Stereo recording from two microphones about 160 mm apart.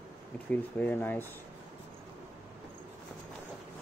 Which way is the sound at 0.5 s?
10° left (ahead or behind).